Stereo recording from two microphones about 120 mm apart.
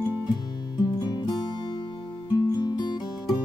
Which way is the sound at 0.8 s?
40° left (ahead or behind).